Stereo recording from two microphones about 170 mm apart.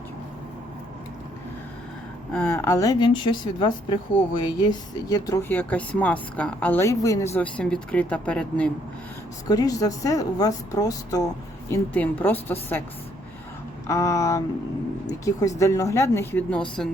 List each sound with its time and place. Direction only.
2.3 s speech: 10° left (ahead or behind)
9.5 s speech: 20° left (ahead or behind)
13.8 s speech: 15° left (ahead or behind)